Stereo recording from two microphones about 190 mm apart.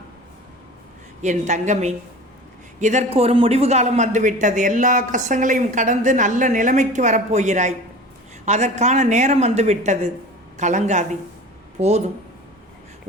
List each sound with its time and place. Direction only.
1.2 s speech: 40° right (ahead or behind)